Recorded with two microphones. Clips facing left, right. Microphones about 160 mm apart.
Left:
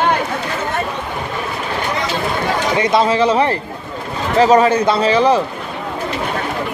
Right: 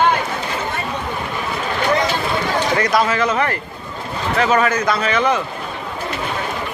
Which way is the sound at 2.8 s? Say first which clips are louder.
Left 6 dB; 25° left (ahead or behind).